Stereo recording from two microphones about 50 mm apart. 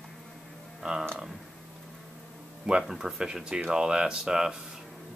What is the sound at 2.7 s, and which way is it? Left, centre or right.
Speech, centre.